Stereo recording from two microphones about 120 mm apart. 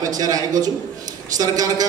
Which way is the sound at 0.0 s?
30° right (ahead or behind).